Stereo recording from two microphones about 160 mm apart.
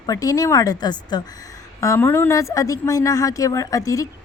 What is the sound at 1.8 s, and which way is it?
Speech, 15° left (ahead or behind).